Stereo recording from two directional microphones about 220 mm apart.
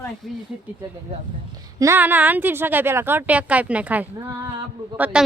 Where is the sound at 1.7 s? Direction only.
10° right (ahead or behind).